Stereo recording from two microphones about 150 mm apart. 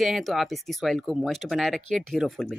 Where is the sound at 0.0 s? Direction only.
Centre (ahead or behind).